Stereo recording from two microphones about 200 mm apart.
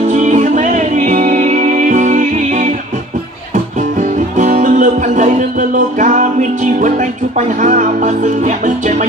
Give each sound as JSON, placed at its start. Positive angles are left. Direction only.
{"t": 0.0, "sound": "music", "side_deg": -40}
{"t": 4.0, "sound": "music", "side_deg": -40}